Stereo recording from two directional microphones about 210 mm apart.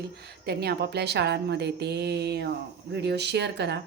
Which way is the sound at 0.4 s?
50° right (ahead or behind).